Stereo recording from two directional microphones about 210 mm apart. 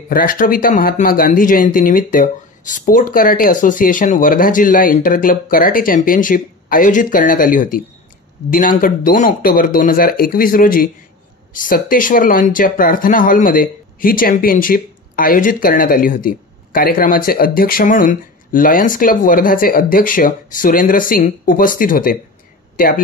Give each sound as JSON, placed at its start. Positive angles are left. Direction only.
{"t": 0.1, "sound": "speech", "side_deg": 40}